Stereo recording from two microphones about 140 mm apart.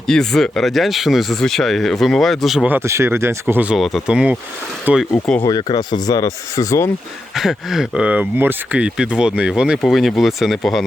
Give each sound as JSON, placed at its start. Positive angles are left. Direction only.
{"t": 0.1, "sound": "speech", "side_deg": 5}
{"t": 2.6, "sound": "speech", "side_deg": -15}
{"t": 5.1, "sound": "speech", "side_deg": 5}
{"t": 5.4, "sound": "speech", "side_deg": 30}
{"t": 7.3, "sound": "speech", "side_deg": 0}